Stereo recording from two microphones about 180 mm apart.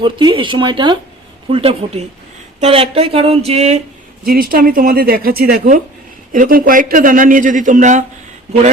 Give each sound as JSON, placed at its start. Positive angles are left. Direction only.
{"t": 0.0, "sound": "speech", "side_deg": -25}
{"t": 4.2, "sound": "speech", "side_deg": -55}